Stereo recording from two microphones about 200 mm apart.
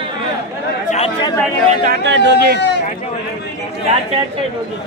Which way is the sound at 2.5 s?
60° left (ahead or behind).